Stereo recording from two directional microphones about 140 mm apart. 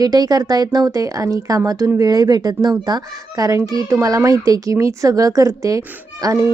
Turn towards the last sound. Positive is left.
turn(degrees=-25)  # may be behind; listen again after turning